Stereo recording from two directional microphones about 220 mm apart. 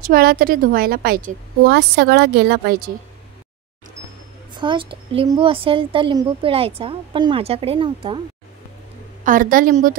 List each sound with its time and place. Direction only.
0.0 s a woman's voice: 45° right (ahead or behind)
4.6 s a woman's voice: 20° right (ahead or behind)
9.2 s a woman's voice: 40° right (ahead or behind)